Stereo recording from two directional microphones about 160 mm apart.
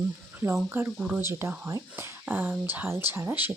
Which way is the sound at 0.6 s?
15° right (ahead or behind).